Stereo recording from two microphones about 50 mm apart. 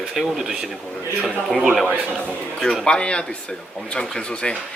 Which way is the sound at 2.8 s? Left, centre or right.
Centre.